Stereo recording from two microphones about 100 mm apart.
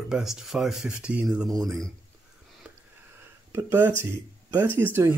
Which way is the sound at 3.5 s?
25° right (ahead or behind).